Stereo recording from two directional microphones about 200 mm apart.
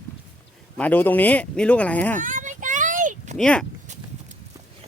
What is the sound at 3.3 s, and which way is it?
Speech, 5° left (ahead or behind).